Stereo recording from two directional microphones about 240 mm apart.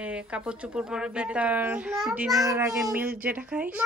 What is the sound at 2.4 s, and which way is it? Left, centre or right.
A woman's voice, centre.